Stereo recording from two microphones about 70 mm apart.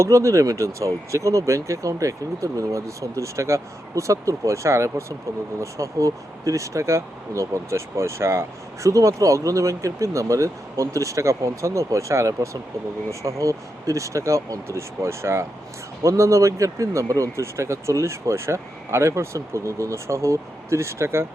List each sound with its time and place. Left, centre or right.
0.0 s speech: right